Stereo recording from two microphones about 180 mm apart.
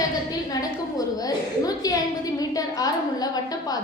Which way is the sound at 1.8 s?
20° left (ahead or behind).